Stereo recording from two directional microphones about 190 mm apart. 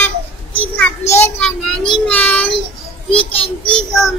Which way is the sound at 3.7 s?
Centre (ahead or behind).